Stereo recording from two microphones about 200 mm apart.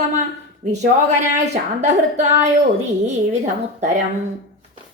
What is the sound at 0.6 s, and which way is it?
A woman's voice, 35° right (ahead or behind).